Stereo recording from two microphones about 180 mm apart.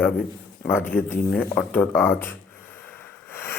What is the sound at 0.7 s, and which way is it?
Speech, 10° left (ahead or behind).